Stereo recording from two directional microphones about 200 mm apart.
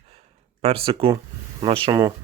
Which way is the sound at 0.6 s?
30° right (ahead or behind).